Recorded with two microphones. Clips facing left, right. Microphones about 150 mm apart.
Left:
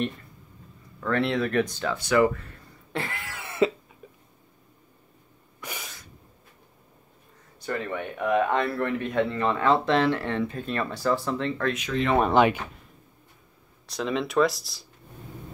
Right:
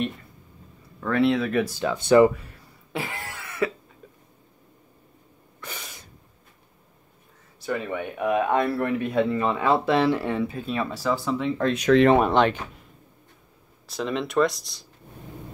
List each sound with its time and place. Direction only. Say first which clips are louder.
1.0 s speech: right 3 dB; 5° right (ahead or behind)
2.0 s speech: right 6 dB; 25° right (ahead or behind); by 3.2 s 10° right (ahead or behind)
3.4 s cough: left 4 dB; 25° left (ahead or behind)
5.6 s sneeze: left 1 dB; 10° left (ahead or behind)
7.6 s speech: right 2 dB; 10° right (ahead or behind)
13.8 s speech: even; centre (ahead or behind)